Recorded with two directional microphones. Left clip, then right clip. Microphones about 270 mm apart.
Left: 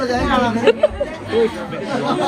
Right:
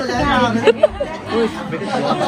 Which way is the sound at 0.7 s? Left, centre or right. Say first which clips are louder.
Right 1 dB; centre.